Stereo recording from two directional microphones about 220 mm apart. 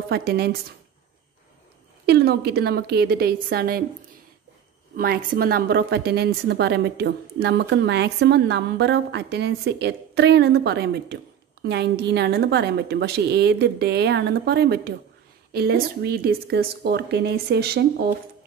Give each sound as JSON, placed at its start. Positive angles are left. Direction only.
{"t": 0.1, "sound": "a woman's voice", "side_deg": -45}
{"t": 2.0, "sound": "a woman's voice", "side_deg": -50}
{"t": 4.9, "sound": "a woman's voice", "side_deg": -40}